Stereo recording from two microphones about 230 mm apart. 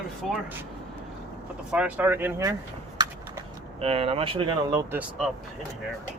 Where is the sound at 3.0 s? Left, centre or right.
Centre.